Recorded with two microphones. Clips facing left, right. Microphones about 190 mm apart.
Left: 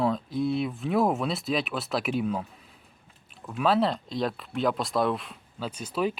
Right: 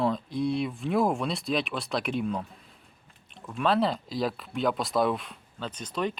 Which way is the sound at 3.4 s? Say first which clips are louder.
Left 1 dB; 5° left (ahead or behind).